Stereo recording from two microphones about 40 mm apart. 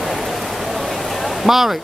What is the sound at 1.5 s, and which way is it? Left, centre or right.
Speech, centre.